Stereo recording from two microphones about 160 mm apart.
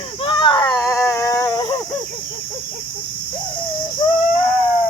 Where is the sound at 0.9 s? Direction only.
20° left (ahead or behind).